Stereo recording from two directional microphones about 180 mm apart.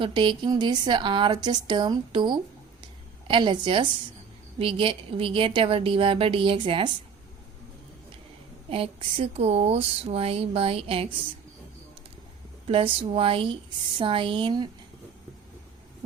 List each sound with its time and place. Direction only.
0.0 s a woman's voice: 25° right (ahead or behind)
8.7 s speech: 30° right (ahead or behind)
12.6 s a woman's voice: 30° right (ahead or behind)